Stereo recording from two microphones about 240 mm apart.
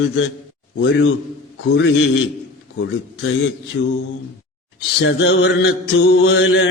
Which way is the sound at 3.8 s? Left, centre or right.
Left.